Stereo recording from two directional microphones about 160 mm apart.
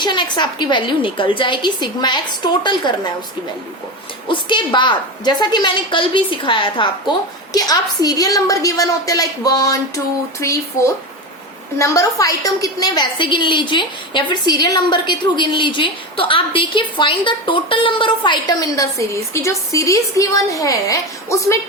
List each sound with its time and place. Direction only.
0.0 s a woman's voice: 30° left (ahead or behind)
4.3 s a woman's voice: 30° left (ahead or behind)